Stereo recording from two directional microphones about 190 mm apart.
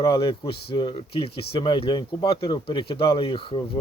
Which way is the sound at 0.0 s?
30° left (ahead or behind).